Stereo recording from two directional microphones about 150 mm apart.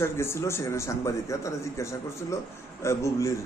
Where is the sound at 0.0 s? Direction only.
15° left (ahead or behind).